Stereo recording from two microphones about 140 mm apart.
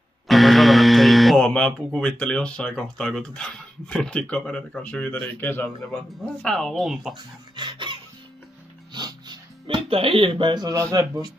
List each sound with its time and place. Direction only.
0.3 s speech: centre (ahead or behind)
7.5 s music: 35° right (ahead or behind)